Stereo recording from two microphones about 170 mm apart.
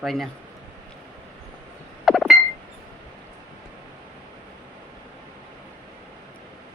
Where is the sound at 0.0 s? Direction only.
Centre (ahead or behind).